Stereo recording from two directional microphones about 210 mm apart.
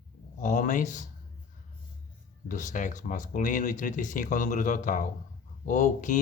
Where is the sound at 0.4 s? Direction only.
40° left (ahead or behind).